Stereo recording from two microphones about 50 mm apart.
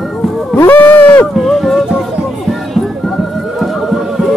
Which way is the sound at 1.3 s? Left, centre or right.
Centre.